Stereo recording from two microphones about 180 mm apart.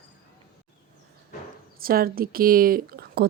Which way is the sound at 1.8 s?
55° right (ahead or behind).